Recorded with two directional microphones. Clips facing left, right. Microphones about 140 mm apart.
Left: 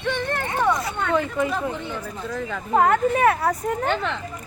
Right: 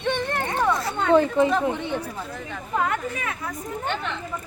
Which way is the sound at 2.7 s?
50° left (ahead or behind).